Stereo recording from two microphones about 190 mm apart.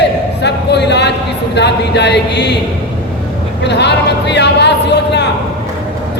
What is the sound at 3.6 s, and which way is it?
A man's voice, 65° left (ahead or behind).